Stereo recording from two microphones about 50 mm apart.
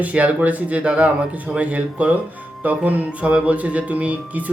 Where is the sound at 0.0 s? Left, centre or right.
Right.